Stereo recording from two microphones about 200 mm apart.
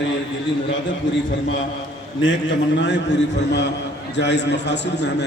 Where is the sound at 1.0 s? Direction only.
75° left (ahead or behind).